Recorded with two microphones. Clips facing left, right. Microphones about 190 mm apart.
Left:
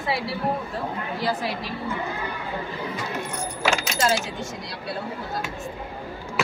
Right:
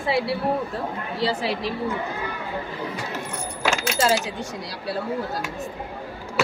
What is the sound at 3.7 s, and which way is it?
Speech, 10° right (ahead or behind).